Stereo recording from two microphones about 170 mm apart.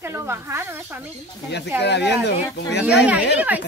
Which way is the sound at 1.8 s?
85° left.